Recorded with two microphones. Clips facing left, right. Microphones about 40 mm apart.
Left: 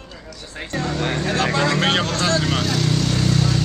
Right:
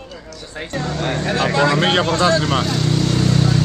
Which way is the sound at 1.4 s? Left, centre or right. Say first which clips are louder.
Right 4 dB; centre.